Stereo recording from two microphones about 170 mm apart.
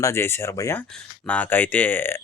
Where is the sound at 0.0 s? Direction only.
15° left (ahead or behind).